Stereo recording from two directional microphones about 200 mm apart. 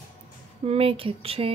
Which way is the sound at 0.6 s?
30° right (ahead or behind).